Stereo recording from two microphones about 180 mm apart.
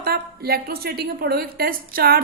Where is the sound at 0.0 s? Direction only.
60° right (ahead or behind).